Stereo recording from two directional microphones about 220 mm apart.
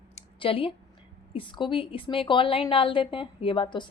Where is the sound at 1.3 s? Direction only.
20° left (ahead or behind).